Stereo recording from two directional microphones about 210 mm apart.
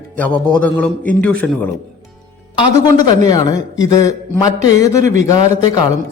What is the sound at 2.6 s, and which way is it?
A man's voice, 20° left (ahead or behind).